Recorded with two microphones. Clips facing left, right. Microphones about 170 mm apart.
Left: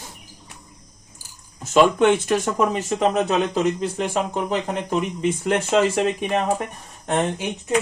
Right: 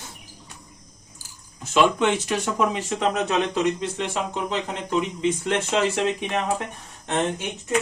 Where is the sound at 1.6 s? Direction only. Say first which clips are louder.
Left 4 dB; 50° left (ahead or behind).